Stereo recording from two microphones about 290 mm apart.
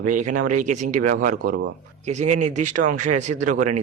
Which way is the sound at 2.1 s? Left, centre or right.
Right.